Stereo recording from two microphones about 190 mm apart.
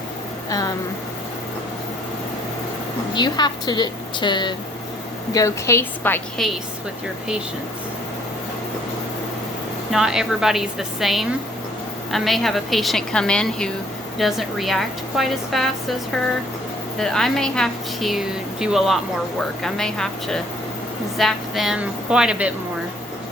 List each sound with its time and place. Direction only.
3.2 s a woman's voice: 20° left (ahead or behind); by 6.5 s 5° left (ahead or behind)
9.9 s a woman's voice: 5° right (ahead or behind)
17.0 s a woman's voice: 5° left (ahead or behind)